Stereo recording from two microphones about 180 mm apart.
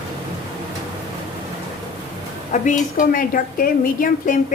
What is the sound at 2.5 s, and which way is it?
A woman's voice, 40° left (ahead or behind).